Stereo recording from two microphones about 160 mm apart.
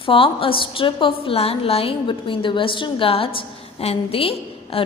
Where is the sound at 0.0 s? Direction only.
35° left (ahead or behind).